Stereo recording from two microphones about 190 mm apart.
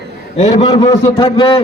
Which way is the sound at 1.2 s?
30° left (ahead or behind).